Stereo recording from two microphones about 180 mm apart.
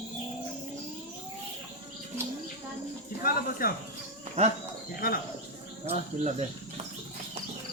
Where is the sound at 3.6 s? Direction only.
50° left (ahead or behind).